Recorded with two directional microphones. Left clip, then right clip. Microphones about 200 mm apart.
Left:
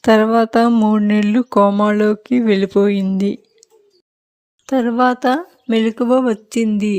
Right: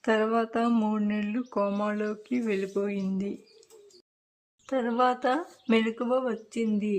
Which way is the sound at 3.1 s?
40° left (ahead or behind).